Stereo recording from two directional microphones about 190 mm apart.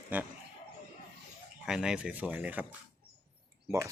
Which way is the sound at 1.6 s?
5° right (ahead or behind).